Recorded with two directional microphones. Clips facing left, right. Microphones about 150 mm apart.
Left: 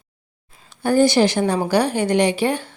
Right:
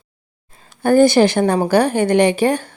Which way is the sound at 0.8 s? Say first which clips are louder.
Right 4 dB; 50° right (ahead or behind).